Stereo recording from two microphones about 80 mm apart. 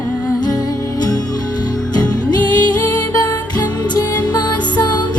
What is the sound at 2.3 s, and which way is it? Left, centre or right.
Music, left.